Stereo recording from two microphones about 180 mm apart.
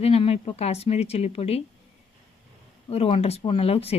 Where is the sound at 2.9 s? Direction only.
35° left (ahead or behind).